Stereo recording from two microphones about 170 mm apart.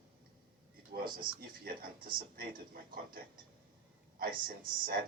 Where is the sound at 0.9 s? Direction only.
60° right (ahead or behind).